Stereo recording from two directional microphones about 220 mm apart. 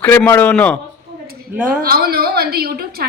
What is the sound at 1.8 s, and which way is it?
A woman's voice, 45° right (ahead or behind).